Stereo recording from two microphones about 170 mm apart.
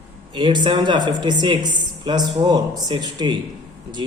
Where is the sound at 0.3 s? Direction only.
25° right (ahead or behind).